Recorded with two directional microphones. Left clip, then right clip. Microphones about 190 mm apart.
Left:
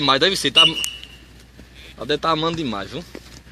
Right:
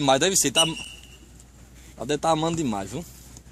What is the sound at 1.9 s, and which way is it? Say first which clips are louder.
Speech: left 3 dB; 65° right (ahead or behind).